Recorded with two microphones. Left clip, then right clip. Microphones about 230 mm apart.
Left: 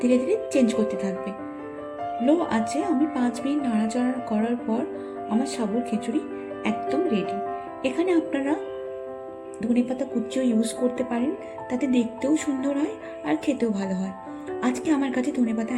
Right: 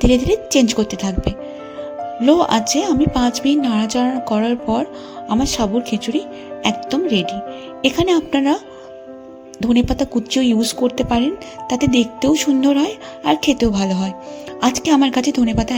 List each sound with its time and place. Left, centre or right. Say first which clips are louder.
0.1 s speech: right 7 dB; right
9.6 s speech: right 8 dB; right